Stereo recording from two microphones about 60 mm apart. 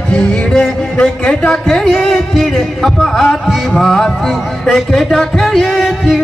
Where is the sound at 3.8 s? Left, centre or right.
Centre.